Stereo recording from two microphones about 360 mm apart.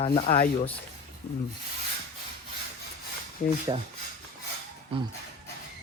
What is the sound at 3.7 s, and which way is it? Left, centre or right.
Speech, centre.